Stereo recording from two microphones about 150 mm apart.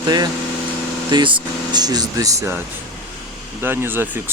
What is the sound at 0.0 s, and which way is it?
Speech, 25° right (ahead or behind).